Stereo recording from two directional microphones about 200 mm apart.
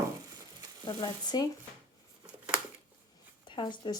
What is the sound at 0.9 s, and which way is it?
Speech, 25° left (ahead or behind).